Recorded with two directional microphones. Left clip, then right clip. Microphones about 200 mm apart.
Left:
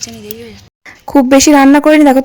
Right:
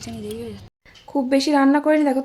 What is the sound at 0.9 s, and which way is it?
Speech, 45° left (ahead or behind).